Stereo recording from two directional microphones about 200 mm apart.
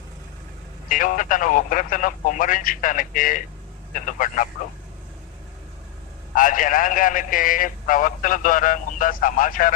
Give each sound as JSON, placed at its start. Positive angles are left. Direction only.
{"t": 0.9, "sound": "a man's voice", "side_deg": 40}
{"t": 6.3, "sound": "a man's voice", "side_deg": 40}